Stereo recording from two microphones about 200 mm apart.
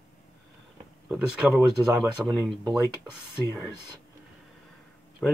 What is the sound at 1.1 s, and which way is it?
Speech, 5° right (ahead or behind).